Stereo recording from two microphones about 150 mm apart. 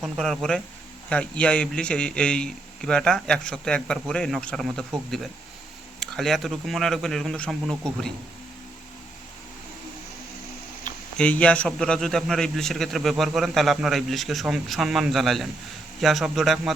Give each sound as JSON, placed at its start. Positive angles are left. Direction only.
{"t": 0.0, "sound": "a man's voice", "side_deg": 0}
{"t": 6.0, "sound": "a man's voice", "side_deg": 0}
{"t": 11.2, "sound": "a man's voice", "side_deg": 10}